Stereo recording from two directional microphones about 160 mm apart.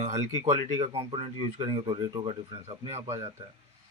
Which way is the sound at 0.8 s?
35° right (ahead or behind).